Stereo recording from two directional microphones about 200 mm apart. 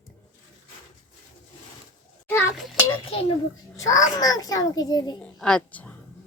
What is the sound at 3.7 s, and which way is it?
A child's voice, 15° left (ahead or behind).